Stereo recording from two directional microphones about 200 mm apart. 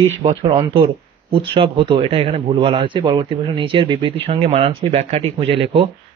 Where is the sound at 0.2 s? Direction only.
30° right (ahead or behind).